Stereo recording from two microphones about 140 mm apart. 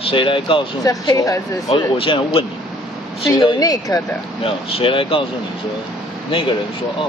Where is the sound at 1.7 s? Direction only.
40° left (ahead or behind).